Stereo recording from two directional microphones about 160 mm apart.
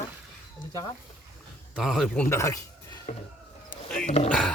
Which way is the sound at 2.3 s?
20° left (ahead or behind).